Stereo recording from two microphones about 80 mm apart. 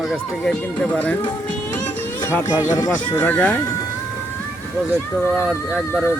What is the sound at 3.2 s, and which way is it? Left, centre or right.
Speech, centre.